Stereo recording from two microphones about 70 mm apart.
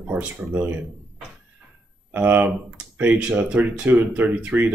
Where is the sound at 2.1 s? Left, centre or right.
Right.